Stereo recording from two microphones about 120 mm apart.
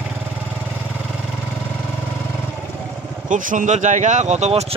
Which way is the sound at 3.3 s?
90° right.